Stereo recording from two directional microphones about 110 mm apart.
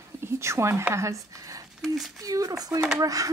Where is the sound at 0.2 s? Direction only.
25° right (ahead or behind).